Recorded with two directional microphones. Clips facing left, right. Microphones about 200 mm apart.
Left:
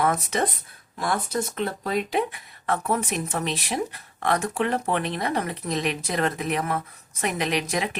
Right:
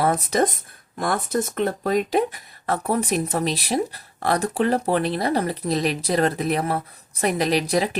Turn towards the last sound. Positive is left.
turn(degrees=-35)  # may be behind; listen again after turning